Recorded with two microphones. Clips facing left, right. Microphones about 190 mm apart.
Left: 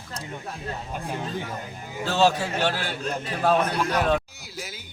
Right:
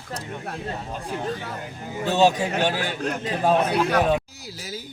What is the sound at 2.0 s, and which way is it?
A man's voice, 15° right (ahead or behind).